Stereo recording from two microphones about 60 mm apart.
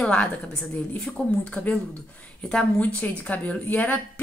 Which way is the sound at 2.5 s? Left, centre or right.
Centre.